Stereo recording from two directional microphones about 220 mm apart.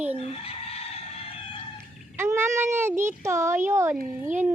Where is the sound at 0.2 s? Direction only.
25° left (ahead or behind).